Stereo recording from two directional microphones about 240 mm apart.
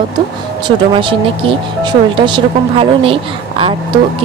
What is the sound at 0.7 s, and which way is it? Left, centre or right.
Speech, right.